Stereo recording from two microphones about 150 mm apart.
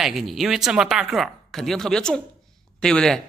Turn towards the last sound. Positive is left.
turn(degrees=5)  # may be behind; listen again after turning